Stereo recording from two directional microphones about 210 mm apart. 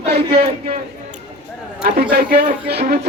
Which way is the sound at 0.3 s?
25° right (ahead or behind).